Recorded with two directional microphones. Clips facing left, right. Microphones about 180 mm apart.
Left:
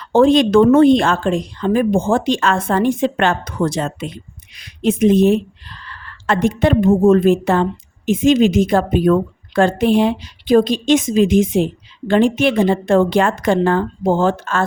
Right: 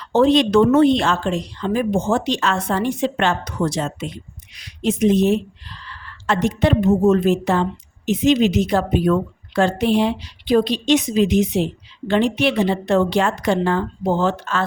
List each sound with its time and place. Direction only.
0.0 s a woman's voice: 50° left (ahead or behind)